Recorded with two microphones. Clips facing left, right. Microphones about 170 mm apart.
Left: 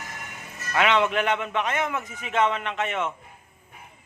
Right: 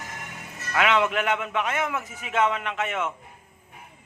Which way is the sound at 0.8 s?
5° right (ahead or behind).